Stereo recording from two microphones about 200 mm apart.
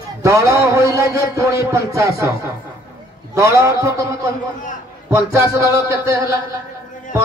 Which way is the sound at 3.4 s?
15° right (ahead or behind).